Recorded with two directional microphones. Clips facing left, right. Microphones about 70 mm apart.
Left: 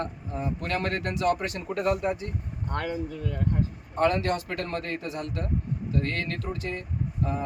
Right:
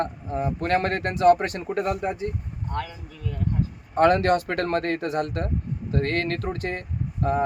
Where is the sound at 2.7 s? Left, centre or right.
Left.